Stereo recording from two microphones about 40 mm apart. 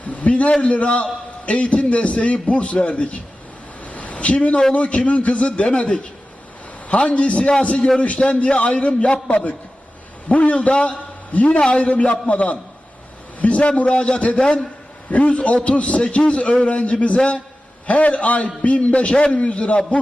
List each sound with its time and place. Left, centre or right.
0.0 s a man's voice: left
3.8 s a sound: left
4.7 s a man's voice: left
15.1 s a man's voice: left